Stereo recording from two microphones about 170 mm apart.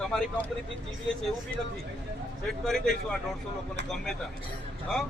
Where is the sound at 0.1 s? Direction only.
5° left (ahead or behind).